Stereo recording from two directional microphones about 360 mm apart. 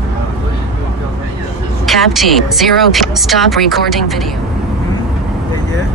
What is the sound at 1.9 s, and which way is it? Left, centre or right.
Speech, centre.